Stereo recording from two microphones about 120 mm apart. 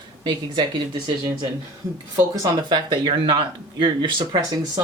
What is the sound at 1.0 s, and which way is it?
Speech, 35° right (ahead or behind).